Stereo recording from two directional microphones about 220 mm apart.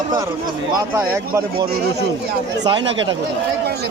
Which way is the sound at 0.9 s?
15° right (ahead or behind).